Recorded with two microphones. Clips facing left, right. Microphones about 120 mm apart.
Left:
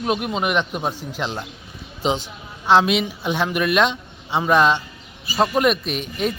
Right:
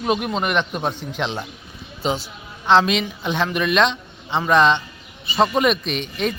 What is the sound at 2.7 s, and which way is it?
Speech, 10° left (ahead or behind).